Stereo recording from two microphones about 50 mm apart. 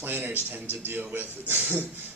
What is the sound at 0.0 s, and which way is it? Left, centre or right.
A man's voice, right.